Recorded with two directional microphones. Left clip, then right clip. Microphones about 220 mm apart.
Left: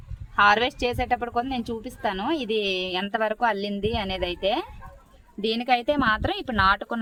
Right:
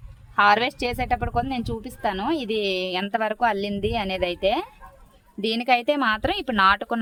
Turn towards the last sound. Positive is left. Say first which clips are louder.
# right 2 dB
turn(degrees=-35)  # may be behind; listen again after turning